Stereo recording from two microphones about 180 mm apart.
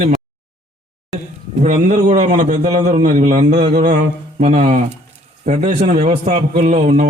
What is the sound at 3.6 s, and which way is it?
Speech, 35° right (ahead or behind).